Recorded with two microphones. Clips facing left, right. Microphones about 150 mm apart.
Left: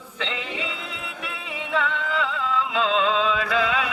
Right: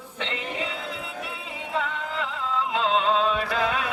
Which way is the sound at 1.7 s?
90° left.